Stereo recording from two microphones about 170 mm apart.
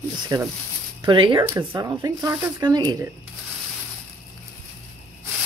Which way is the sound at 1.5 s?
15° right (ahead or behind).